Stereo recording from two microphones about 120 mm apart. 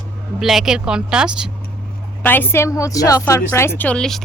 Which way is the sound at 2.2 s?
15° left (ahead or behind).